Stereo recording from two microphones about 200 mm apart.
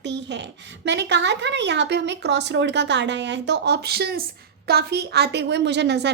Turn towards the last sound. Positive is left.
turn(degrees=-60)  # may be behind; listen again after turning